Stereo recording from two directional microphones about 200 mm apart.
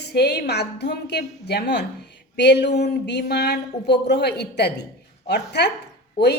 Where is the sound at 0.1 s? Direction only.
55° left (ahead or behind).